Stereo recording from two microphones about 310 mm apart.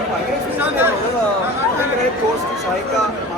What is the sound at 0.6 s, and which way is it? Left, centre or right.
Speech, centre.